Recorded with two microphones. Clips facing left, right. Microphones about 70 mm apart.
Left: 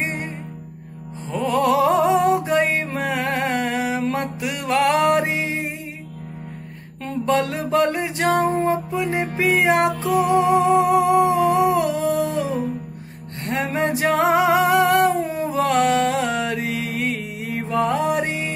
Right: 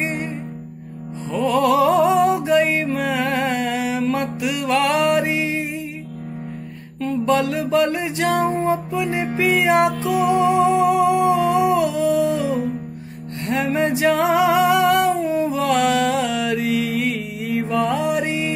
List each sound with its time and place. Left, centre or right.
1.3 s music: left
7.2 s music: left
10.3 s humming: left
13.5 s music: left